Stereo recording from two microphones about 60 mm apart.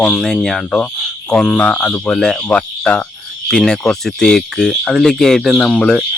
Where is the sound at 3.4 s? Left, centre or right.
Centre.